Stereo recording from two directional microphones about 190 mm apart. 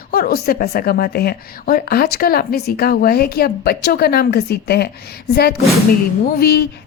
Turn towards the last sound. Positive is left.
turn(degrees=55)  # may be behind; listen again after turning